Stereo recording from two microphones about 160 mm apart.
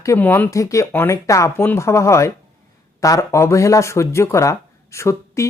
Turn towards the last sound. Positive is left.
turn(degrees=20)  # may be behind; listen again after turning